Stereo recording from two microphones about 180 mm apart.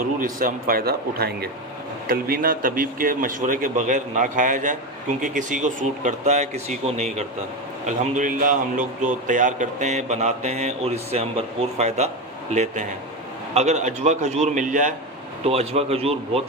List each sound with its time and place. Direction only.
0.2 s a man's voice: 50° right (ahead or behind)
15.4 s a man's voice: 35° right (ahead or behind)